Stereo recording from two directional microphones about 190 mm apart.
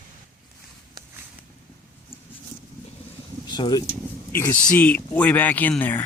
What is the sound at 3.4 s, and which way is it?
Speech, 25° left (ahead or behind).